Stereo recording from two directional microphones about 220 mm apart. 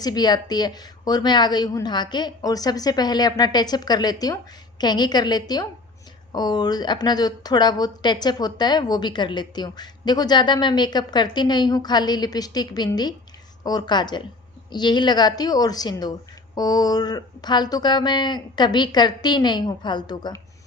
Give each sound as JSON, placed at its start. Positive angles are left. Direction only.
{"t": 0.0, "sound": "a woman's voice", "side_deg": 20}